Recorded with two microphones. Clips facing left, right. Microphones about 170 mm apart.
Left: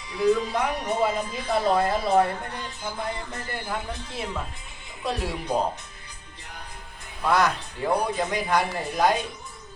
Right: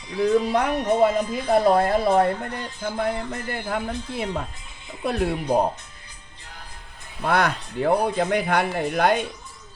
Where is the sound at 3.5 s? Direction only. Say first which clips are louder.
Right 4 dB; 60° right (ahead or behind).